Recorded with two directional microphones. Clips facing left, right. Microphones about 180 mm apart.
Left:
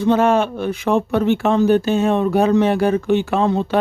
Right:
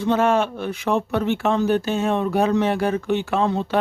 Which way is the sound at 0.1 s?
25° left (ahead or behind).